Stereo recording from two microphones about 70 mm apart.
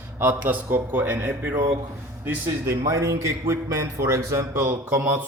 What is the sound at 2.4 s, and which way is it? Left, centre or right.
A man's voice, right.